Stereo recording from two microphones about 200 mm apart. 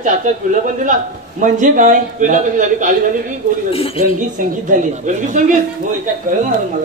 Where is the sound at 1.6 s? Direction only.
40° right (ahead or behind).